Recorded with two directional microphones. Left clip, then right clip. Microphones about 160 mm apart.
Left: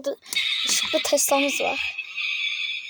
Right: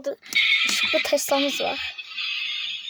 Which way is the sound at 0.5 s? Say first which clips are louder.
Right 3 dB; 45° right (ahead or behind).